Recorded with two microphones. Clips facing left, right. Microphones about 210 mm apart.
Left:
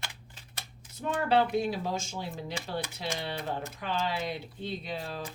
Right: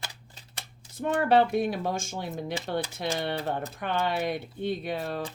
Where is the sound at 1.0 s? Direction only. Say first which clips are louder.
Right 4 dB; 60° right (ahead or behind).